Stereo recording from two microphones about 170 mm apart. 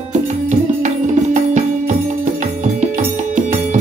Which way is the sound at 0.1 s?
45° right (ahead or behind).